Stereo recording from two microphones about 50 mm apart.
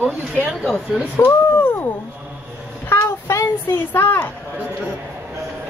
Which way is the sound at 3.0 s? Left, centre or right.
Left.